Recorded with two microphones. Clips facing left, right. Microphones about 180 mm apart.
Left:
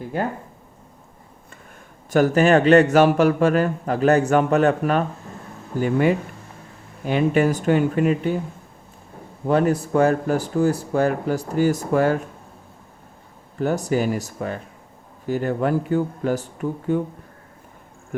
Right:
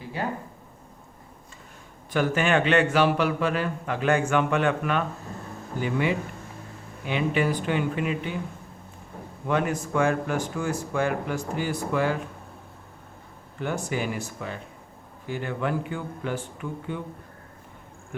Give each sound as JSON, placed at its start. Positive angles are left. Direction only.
{"t": 0.0, "sound": "speech", "side_deg": 50}
{"t": 2.0, "sound": "a man's voice", "side_deg": 40}
{"t": 9.5, "sound": "a man's voice", "side_deg": 35}
{"t": 13.6, "sound": "a man's voice", "side_deg": 40}
{"t": 18.1, "sound": "speech", "side_deg": 45}